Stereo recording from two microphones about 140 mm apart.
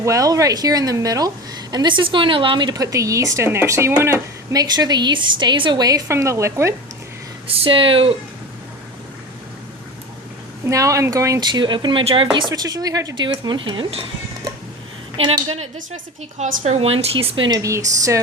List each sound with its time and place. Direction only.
0.0 s a woman's voice: 25° right (ahead or behind)
7.4 s speech: 40° right (ahead or behind)
10.7 s speech: 20° right (ahead or behind); by 14.1 s 40° right (ahead or behind)
15.2 s a woman's voice: 45° right (ahead or behind)
17.6 s a woman's voice: 25° right (ahead or behind)